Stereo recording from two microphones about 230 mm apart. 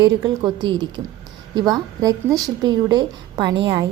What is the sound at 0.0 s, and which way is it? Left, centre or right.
A woman's voice, centre.